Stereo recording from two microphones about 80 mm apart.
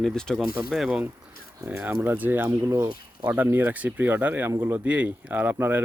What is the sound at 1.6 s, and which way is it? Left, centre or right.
Speech, right.